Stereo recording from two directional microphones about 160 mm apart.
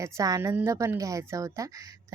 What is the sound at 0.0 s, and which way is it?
Speech, 20° right (ahead or behind).